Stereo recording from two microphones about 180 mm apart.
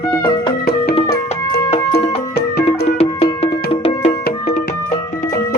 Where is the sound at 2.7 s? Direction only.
35° left (ahead or behind).